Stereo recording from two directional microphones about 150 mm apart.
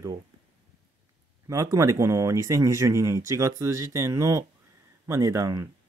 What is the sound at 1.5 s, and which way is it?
Speech, 20° right (ahead or behind).